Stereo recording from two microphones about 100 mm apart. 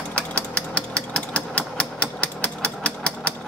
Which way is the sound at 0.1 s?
10° left (ahead or behind).